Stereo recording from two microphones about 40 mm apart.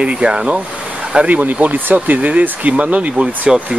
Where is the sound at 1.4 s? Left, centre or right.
Right.